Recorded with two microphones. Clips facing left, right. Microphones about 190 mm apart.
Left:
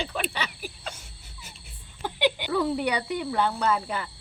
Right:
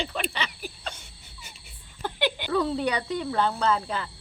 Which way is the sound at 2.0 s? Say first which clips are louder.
Left 2 dB; 15° left (ahead or behind).